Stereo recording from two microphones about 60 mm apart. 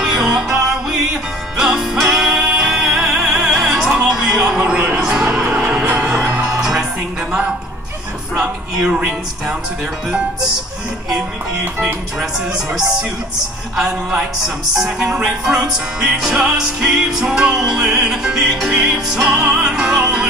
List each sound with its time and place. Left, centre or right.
0.0 s music: centre
4.1 s a sound: centre
4.4 s music: centre
8.4 s music: centre
11.8 s music: centre